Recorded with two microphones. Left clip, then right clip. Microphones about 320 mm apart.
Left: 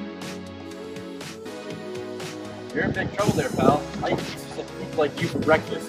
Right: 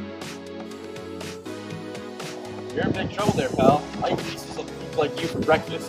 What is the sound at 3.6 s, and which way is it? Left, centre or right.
Speech, centre.